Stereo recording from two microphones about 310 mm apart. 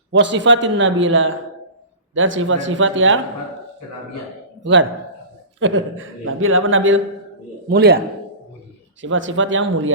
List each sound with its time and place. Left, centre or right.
0.1 s a man's voice: right
4.6 s a man's voice: right